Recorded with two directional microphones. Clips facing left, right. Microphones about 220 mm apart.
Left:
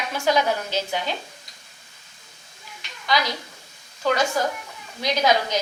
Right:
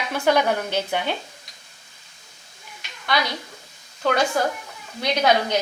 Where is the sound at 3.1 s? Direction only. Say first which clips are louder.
Even; 60° right (ahead or behind).